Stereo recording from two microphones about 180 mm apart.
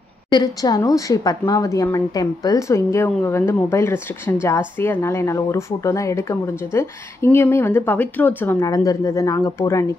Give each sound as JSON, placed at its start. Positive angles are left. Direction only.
{"t": 0.3, "sound": "a woman's voice", "side_deg": 20}